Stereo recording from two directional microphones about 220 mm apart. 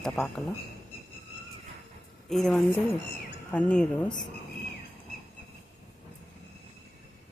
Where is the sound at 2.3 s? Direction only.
Centre (ahead or behind).